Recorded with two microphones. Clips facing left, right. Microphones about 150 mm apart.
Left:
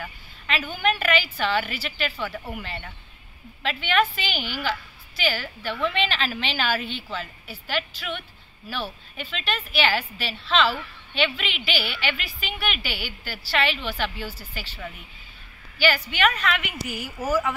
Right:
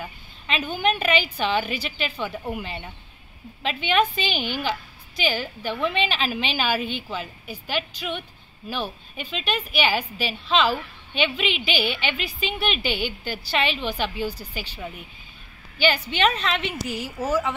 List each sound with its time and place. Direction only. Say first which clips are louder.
0.0 s a woman's voice: right 1 dB; 20° right (ahead or behind)